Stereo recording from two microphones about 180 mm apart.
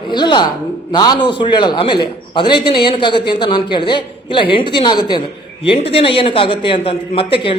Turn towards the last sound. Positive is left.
turn(degrees=30)  # may be behind; listen again after turning